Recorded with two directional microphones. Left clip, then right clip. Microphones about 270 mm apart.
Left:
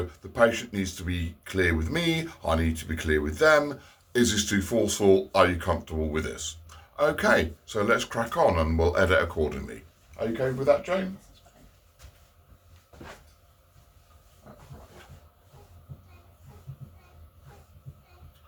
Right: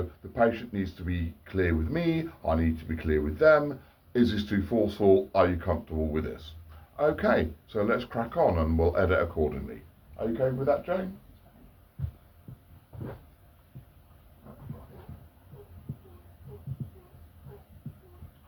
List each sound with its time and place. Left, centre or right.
0.3 s speech: left